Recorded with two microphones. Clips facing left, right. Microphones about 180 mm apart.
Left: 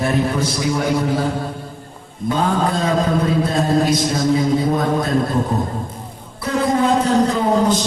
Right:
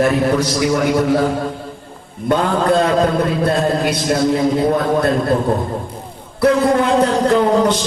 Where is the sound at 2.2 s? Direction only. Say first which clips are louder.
Right 3 dB; 65° right (ahead or behind).